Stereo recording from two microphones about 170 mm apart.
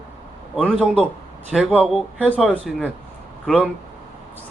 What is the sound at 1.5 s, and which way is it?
Speech, centre (ahead or behind).